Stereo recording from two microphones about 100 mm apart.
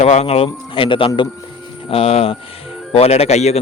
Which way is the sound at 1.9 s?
85° left.